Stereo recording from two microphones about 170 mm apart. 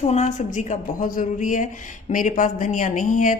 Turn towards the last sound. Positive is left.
turn(degrees=50)  # may be behind; listen again after turning